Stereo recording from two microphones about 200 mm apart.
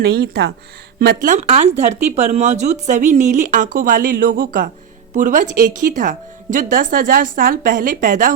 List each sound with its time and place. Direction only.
0.0 s speech: 55° right (ahead or behind)